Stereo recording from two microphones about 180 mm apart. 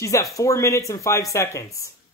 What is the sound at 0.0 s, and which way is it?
Speech, 15° left (ahead or behind).